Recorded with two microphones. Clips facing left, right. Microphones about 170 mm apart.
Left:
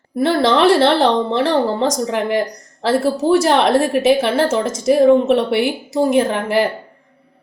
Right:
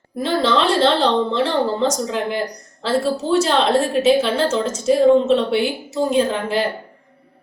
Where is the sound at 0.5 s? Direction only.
65° left (ahead or behind).